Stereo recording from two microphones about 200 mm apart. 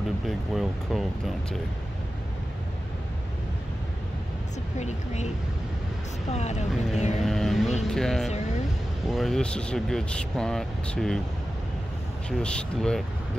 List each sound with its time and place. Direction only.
0.3 s speech: centre (ahead or behind)
4.7 s speech: 35° left (ahead or behind)
6.3 s speech: 35° left (ahead or behind)
7.2 s speech: centre (ahead or behind)
12.3 s speech: 5° left (ahead or behind)